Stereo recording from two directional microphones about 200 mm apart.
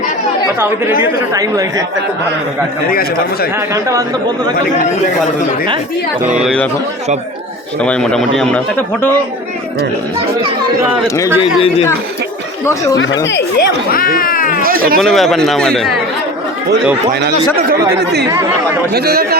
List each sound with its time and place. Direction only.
1.3 s speech: 15° right (ahead or behind)
2.9 s speech: 50° left (ahead or behind)
7.8 s a man's voice: 5° left (ahead or behind)
12.6 s speech: 15° left (ahead or behind)
13.2 s speech: 60° left (ahead or behind); by 14.6 s 45° left (ahead or behind)
14.6 s speech: 45° right (ahead or behind)
14.9 s a man's voice: centre (ahead or behind)
17.2 s a man's voice: 55° right (ahead or behind)